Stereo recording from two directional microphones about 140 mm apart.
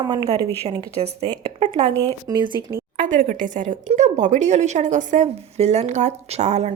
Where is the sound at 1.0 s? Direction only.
45° right (ahead or behind).